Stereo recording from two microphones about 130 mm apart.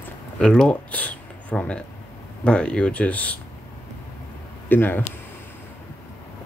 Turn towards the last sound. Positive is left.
turn(degrees=15)  # may be behind; listen again after turning